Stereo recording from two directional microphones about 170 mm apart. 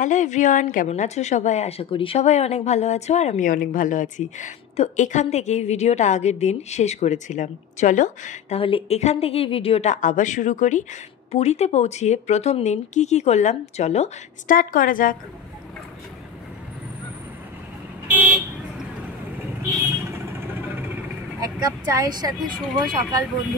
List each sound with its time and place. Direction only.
0.0 s a woman's voice: 45° left (ahead or behind)
18.0 s speech: 10° right (ahead or behind)
20.1 s vehicle: 15° right (ahead or behind)
21.4 s speech: 20° right (ahead or behind)